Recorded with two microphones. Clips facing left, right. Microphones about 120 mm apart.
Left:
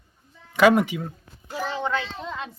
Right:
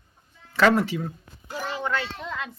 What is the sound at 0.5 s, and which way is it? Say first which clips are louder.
Speech: left 2 dB; 15° left (ahead or behind).